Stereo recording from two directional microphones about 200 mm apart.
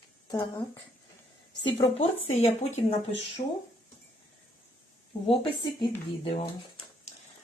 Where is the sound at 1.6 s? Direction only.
25° left (ahead or behind).